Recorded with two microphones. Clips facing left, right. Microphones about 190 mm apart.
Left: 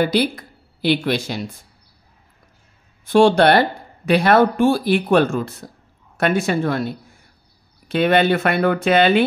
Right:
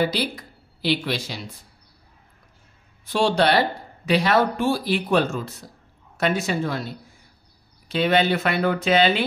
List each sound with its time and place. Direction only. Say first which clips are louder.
0.0 s speech: left 5 dB; 55° left (ahead or behind)
3.1 s speech: left 7 dB; 55° left (ahead or behind)